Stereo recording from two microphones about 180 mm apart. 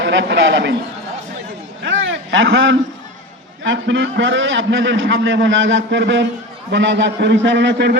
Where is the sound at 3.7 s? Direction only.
90° right.